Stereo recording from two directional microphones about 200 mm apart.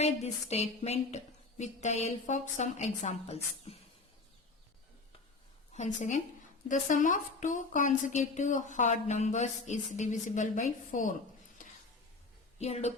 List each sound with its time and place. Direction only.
0.0 s a woman's voice: 35° left (ahead or behind)
5.7 s a woman's voice: 35° left (ahead or behind)
11.6 s a sound: 40° left (ahead or behind)
12.5 s a woman's voice: 35° left (ahead or behind)